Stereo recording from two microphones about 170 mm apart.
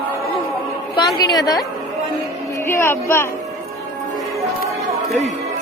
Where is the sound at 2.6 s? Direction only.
15° left (ahead or behind).